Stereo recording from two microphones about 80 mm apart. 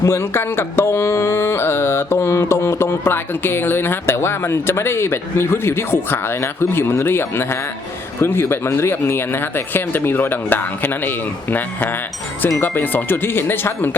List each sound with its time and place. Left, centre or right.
0.0 s music: left
2.1 s speech: left
12.5 s speech: left